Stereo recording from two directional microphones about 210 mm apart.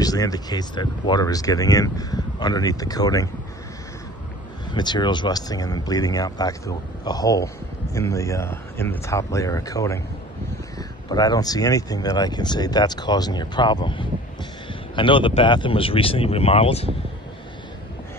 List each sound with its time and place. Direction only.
0.0 s speech: 15° left (ahead or behind)
4.7 s speech: 20° left (ahead or behind)